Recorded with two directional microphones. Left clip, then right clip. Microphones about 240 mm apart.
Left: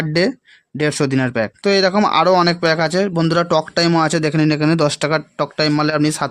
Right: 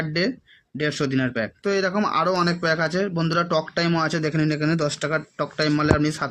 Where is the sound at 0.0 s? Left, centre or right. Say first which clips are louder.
Left 7 dB; left.